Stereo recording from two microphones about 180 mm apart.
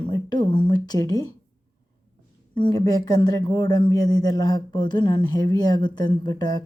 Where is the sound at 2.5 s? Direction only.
20° left (ahead or behind).